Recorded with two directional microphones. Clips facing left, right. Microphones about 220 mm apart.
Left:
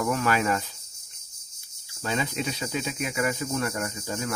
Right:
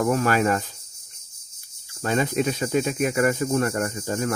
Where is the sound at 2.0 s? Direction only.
50° right (ahead or behind).